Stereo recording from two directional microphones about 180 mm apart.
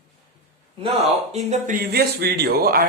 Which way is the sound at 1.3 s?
40° right (ahead or behind).